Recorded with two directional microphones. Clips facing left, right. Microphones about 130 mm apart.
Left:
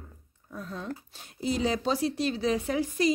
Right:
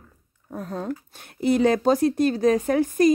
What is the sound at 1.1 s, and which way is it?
Speech, 60° right (ahead or behind).